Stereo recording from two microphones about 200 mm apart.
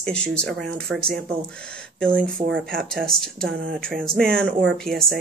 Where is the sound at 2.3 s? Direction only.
55° right (ahead or behind).